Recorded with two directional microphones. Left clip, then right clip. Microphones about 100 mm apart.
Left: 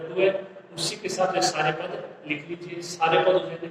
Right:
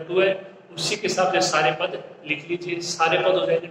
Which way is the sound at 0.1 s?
35° right (ahead or behind).